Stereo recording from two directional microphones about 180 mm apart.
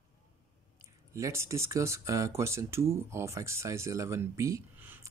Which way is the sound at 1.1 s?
15° right (ahead or behind).